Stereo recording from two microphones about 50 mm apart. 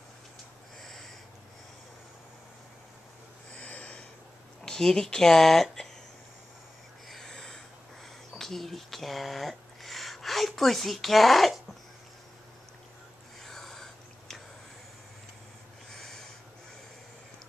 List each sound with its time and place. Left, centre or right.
3.5 s snort: left
4.6 s speech: centre
7.1 s a sound: centre
8.4 s speech: centre
13.4 s a sound: centre
15.9 s snort: centre